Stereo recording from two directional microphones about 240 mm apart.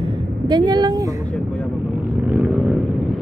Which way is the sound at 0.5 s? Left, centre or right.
Centre.